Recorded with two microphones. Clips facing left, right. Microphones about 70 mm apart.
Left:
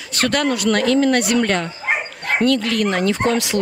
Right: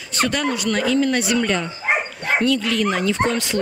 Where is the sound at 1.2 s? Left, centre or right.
Left.